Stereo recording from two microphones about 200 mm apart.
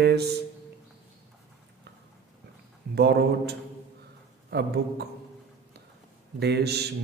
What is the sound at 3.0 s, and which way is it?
A man's voice, 55° right (ahead or behind).